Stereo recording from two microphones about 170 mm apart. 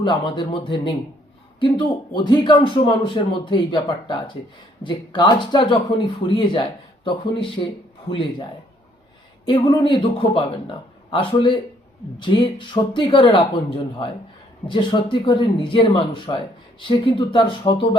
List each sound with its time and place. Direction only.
0.0 s a man's voice: 30° left (ahead or behind)
2.1 s a man's voice: 25° left (ahead or behind)
9.5 s a man's voice: 30° left (ahead or behind)